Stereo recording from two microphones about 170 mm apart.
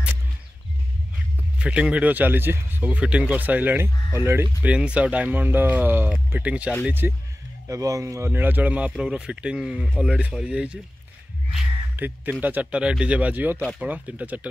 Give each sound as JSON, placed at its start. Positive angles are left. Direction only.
{"t": 1.6, "sound": "speech", "side_deg": -5}